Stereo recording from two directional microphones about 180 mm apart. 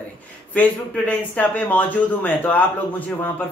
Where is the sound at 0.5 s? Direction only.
10° left (ahead or behind).